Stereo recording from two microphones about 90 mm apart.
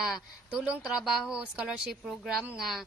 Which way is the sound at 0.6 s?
15° right (ahead or behind).